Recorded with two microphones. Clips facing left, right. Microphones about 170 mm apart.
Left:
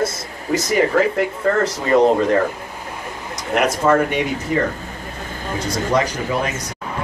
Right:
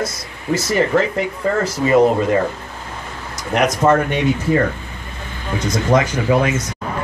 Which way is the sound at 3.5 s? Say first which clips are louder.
Right 1 dB; 10° left (ahead or behind).